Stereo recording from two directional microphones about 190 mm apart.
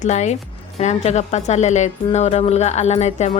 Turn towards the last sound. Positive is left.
turn(degrees=35)  # may be behind; listen again after turning